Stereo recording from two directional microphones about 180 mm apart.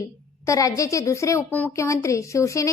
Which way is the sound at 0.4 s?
20° left (ahead or behind).